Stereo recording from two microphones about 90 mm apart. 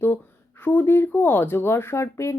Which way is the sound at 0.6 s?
20° left (ahead or behind).